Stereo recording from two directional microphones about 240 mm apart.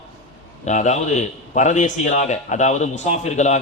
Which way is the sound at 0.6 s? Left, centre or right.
Left.